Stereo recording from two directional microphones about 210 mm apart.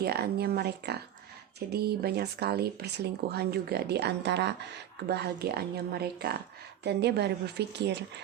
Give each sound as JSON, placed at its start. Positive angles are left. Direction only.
{"t": 0.0, "sound": "speech", "side_deg": -50}